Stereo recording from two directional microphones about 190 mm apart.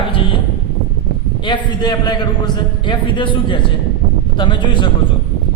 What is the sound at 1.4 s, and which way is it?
A man's voice, 25° left (ahead or behind).